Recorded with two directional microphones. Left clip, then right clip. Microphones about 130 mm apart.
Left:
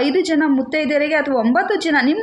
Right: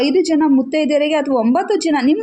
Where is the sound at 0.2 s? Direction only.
40° right (ahead or behind).